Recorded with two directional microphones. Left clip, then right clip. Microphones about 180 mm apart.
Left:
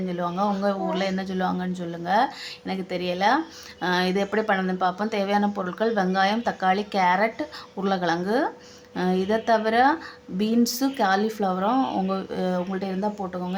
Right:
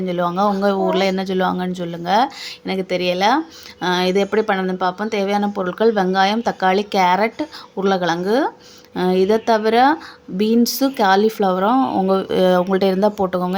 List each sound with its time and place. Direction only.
0.1 s speech: 35° right (ahead or behind)
12.1 s speech: 45° right (ahead or behind)